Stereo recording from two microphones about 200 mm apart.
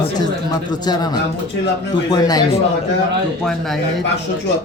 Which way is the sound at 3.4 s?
Centre (ahead or behind).